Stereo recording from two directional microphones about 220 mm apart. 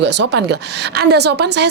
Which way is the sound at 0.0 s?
50° right (ahead or behind).